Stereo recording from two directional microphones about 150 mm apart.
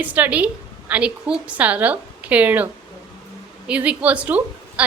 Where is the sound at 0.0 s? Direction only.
10° right (ahead or behind).